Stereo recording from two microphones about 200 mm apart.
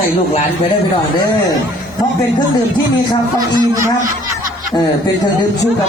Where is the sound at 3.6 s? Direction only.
15° right (ahead or behind).